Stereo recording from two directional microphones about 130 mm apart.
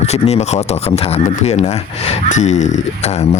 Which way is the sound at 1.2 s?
60° left (ahead or behind).